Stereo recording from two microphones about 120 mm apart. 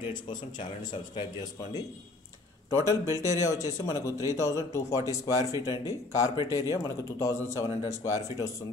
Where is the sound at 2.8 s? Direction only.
25° right (ahead or behind).